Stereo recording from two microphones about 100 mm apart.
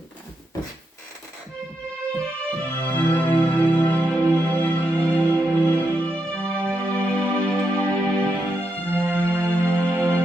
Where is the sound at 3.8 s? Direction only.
15° left (ahead or behind).